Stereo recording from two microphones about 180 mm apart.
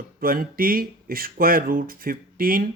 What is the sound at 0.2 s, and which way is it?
Speech, 55° right (ahead or behind).